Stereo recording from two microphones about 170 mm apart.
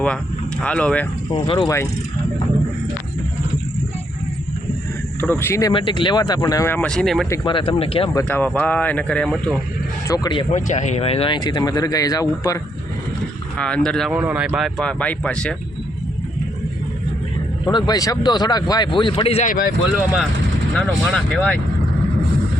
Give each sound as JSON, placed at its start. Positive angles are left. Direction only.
{"t": 0.6, "sound": "speech", "side_deg": 5}
{"t": 1.3, "sound": "speech", "side_deg": 25}
{"t": 5.3, "sound": "speech", "side_deg": 15}
{"t": 5.7, "sound": "speech", "side_deg": 30}
{"t": 7.4, "sound": "speech", "side_deg": 30}
{"t": 8.1, "sound": "speech", "side_deg": 10}
{"t": 10.1, "sound": "speech", "side_deg": 25}
{"t": 10.5, "sound": "speech", "side_deg": 45}
{"t": 13.6, "sound": "speech", "side_deg": 5}
{"t": 14.2, "sound": "speech", "side_deg": -10}
{"t": 17.7, "sound": "speech", "side_deg": 25}
{"t": 19.5, "sound": "speech", "side_deg": 55}
{"t": 20.7, "sound": "speech", "side_deg": 5}